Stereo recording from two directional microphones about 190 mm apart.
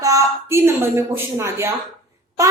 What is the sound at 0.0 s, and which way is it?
A woman's voice, 15° right (ahead or behind).